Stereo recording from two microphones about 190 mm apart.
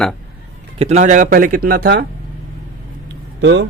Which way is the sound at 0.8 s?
35° right (ahead or behind).